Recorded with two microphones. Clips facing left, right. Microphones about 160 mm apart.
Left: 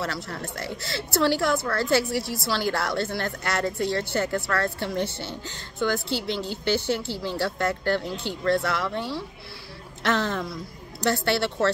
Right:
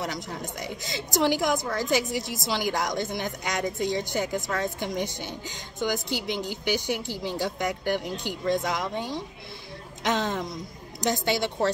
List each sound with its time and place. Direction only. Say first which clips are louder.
0.0 s a woman's voice: left 1 dB; 15° right (ahead or behind)